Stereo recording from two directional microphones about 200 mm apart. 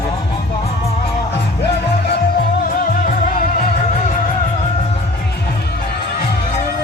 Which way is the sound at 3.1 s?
45° left (ahead or behind).